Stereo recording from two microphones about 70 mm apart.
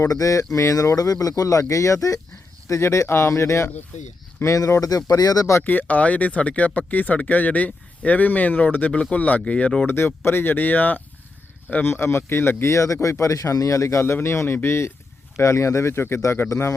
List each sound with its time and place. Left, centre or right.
0.0 s speech: left
5.6 s speech: left
9.8 s a man's voice: left
12.6 s a man's voice: left